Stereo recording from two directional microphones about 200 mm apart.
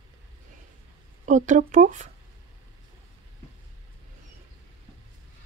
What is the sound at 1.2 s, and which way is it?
Speech, 40° right (ahead or behind).